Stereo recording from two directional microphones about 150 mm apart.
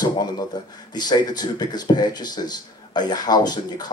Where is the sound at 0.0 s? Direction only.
25° left (ahead or behind).